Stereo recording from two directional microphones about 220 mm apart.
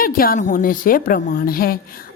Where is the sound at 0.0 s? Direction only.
40° left (ahead or behind).